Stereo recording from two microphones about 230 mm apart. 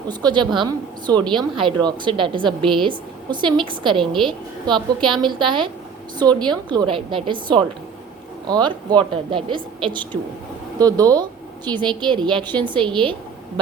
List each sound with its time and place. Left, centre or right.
0.1 s a woman's voice: centre
4.0 s a woman's voice: centre
4.3 s a woman's voice: centre